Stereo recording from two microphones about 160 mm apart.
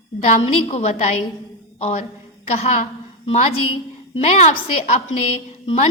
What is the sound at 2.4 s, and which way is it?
A woman's voice, 40° left (ahead or behind).